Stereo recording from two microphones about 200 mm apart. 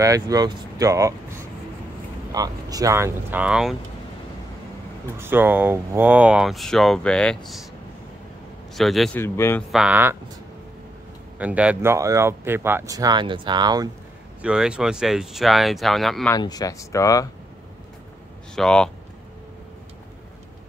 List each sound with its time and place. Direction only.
0.0 s speech: 15° right (ahead or behind)
2.3 s speech: 20° right (ahead or behind)
5.1 s speech: 10° right (ahead or behind)
8.7 s speech: centre (ahead or behind)
9.2 s speech: 10° left (ahead or behind)
9.7 s speech: 5° right (ahead or behind)
11.3 s speech: 5° right (ahead or behind)
14.4 s speech: 5° right (ahead or behind)
16.3 s speech: 20° left (ahead or behind)
18.5 s speech: 5° left (ahead or behind)